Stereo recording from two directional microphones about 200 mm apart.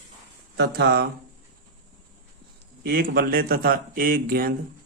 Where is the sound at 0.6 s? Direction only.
55° right (ahead or behind).